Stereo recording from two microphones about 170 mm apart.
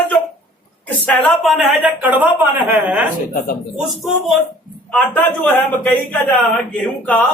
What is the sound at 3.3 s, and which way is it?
Speech, 60° left (ahead or behind).